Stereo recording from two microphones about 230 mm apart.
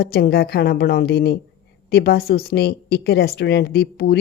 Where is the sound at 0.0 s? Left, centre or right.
Left.